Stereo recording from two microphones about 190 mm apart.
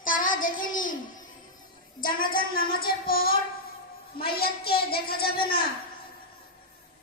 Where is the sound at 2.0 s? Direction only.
50° left (ahead or behind).